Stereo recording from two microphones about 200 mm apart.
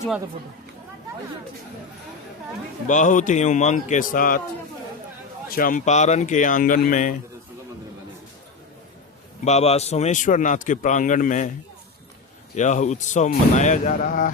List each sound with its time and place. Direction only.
2.8 s a man's voice: 40° left (ahead or behind)
5.5 s a man's voice: 45° left (ahead or behind)
9.4 s a man's voice: 35° left (ahead or behind)
12.5 s a man's voice: 35° left (ahead or behind)